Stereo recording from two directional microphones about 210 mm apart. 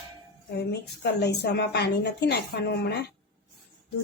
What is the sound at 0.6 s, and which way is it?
A woman's voice, 50° left (ahead or behind).